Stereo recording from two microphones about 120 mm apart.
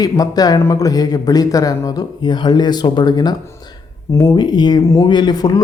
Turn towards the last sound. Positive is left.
turn(degrees=35)  # may be behind; listen again after turning